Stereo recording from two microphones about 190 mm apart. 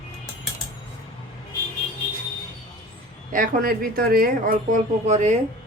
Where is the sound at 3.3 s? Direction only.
45° right (ahead or behind).